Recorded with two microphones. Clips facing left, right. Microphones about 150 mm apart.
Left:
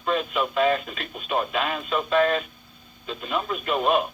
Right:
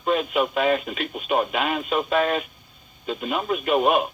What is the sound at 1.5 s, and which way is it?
Speech, 20° right (ahead or behind).